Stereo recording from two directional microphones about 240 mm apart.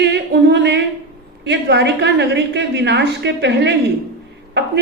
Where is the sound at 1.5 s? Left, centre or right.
Right.